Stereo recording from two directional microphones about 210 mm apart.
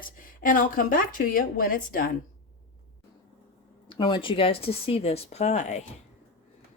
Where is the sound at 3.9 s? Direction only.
20° left (ahead or behind).